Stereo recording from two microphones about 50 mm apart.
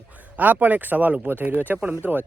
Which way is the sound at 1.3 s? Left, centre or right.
Right.